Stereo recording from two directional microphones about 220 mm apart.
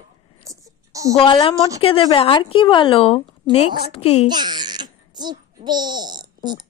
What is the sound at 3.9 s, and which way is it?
Speech, 30° left (ahead or behind).